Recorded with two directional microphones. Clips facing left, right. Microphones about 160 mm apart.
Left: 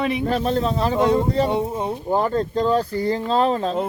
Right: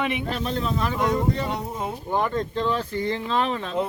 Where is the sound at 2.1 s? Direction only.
35° left (ahead or behind).